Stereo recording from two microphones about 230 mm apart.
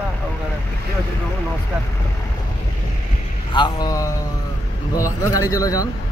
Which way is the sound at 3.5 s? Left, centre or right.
Centre.